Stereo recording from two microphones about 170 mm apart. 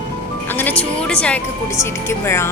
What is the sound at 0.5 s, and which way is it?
Music, 10° left (ahead or behind).